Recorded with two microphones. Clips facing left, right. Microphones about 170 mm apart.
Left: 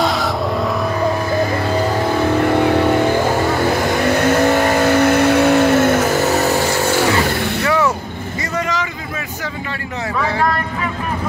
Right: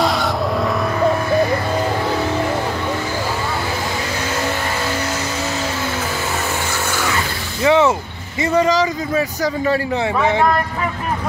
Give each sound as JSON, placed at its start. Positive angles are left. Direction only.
{"t": 2.6, "sound": "vehicle", "side_deg": 60}
{"t": 7.6, "sound": "vehicle", "side_deg": -25}
{"t": 8.5, "sound": "a sound", "side_deg": -35}